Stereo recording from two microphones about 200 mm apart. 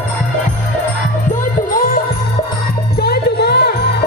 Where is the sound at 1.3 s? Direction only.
45° left (ahead or behind).